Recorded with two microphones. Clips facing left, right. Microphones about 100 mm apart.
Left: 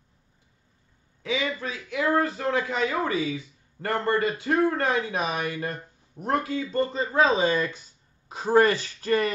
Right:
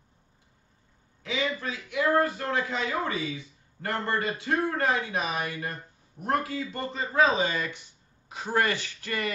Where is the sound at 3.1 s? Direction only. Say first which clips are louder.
Left 5 dB; 30° left (ahead or behind).